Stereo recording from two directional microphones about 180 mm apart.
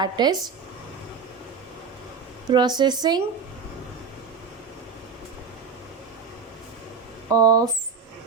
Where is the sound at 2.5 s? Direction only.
25° right (ahead or behind).